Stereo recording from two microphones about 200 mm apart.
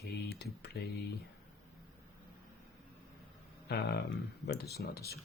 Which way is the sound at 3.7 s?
55° left (ahead or behind).